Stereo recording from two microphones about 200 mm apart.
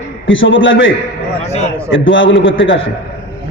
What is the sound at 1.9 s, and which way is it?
Speech, 70° left (ahead or behind).